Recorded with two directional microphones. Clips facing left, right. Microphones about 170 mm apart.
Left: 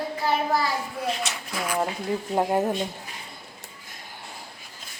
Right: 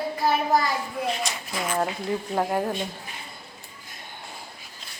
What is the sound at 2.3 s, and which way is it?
Speech, 20° left (ahead or behind).